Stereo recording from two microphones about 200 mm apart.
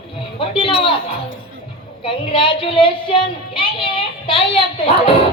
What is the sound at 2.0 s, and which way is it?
A woman's voice, 25° left (ahead or behind).